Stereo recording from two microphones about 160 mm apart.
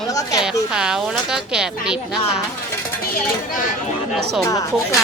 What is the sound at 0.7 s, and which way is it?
A woman's voice, 5° right (ahead or behind).